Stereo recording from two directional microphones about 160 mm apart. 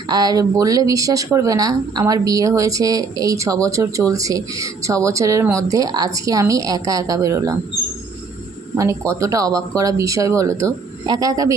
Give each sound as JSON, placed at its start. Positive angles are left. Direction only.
{"t": 0.1, "sound": "speech", "side_deg": -25}
{"t": 8.7, "sound": "speech", "side_deg": -20}